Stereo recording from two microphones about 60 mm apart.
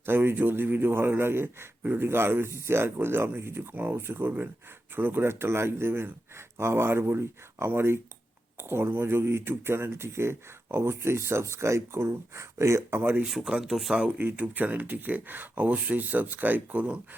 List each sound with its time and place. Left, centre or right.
0.0 s a man's voice: right
1.8 s speech: right
2.0 s a man's voice: right
13.0 s a man's voice: right
13.2 s speech: centre
14.2 s speech: right